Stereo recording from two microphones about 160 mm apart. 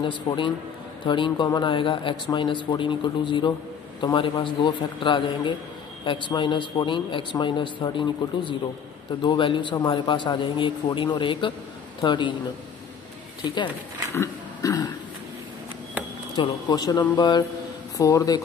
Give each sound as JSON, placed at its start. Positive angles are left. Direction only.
{"t": 0.3, "sound": "a man's voice", "side_deg": 30}
{"t": 14.1, "sound": "pig", "side_deg": 20}
{"t": 16.3, "sound": "a man's voice", "side_deg": 25}